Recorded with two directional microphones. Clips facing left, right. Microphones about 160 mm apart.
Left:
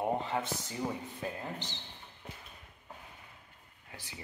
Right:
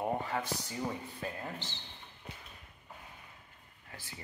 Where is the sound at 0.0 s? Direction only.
25° left (ahead or behind).